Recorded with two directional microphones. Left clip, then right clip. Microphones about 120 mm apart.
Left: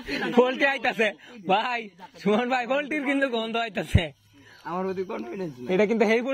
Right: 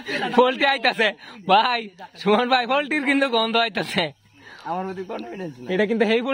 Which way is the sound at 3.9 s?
40° right (ahead or behind).